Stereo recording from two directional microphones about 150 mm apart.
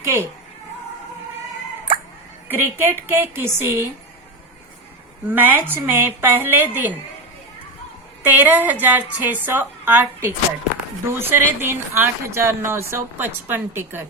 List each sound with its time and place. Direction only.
0.0 s a woman's voice: 15° right (ahead or behind)
2.5 s speech: 15° right (ahead or behind)
5.3 s speech: 15° right (ahead or behind)
8.3 s speech: 10° right (ahead or behind)